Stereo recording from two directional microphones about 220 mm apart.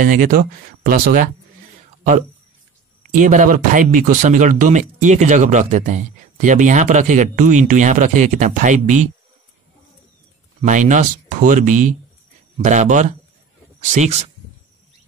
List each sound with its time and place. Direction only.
0.0 s speech: 40° right (ahead or behind)
3.2 s speech: 35° right (ahead or behind)
10.6 s speech: 35° right (ahead or behind)